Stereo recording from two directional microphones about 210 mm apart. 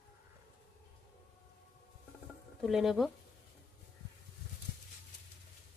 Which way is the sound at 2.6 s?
Centre (ahead or behind).